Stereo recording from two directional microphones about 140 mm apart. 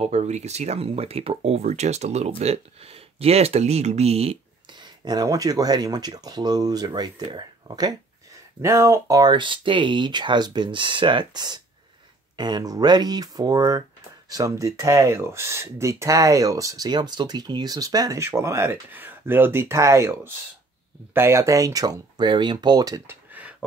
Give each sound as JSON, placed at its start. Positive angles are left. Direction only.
{"t": 0.0, "sound": "speech", "side_deg": -55}
{"t": 4.6, "sound": "speech", "side_deg": -30}